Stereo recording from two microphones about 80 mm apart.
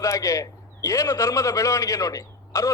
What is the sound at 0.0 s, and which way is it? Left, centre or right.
A man's voice, left.